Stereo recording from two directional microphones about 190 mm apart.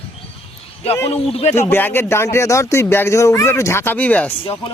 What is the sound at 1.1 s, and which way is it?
Speech, 35° left (ahead or behind).